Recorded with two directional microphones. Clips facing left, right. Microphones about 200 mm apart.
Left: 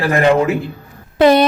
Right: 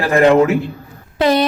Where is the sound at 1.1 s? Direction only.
55° left (ahead or behind).